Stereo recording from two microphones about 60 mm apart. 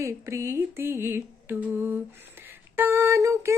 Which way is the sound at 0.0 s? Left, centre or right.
Right.